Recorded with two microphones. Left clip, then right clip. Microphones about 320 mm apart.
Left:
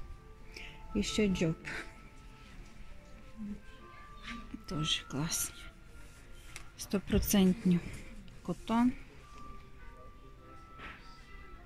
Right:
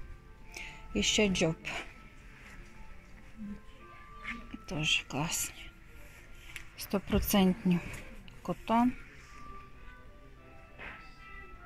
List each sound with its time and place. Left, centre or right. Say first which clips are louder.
0.6 s speech: right 4 dB; centre
4.6 s speech: right 4 dB; centre
6.8 s speech: right 1 dB; centre